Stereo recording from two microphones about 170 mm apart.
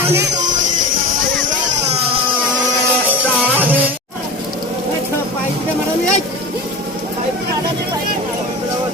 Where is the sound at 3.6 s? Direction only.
10° right (ahead or behind).